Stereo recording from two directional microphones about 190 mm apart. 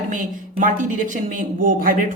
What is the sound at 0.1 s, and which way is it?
Speech, 45° right (ahead or behind).